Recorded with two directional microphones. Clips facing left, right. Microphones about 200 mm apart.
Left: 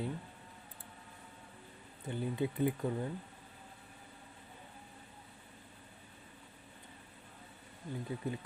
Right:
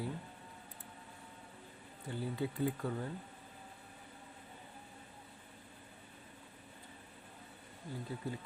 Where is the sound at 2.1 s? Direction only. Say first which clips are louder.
Left 3 dB; 20° left (ahead or behind).